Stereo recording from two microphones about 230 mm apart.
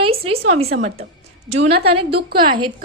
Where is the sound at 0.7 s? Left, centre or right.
Right.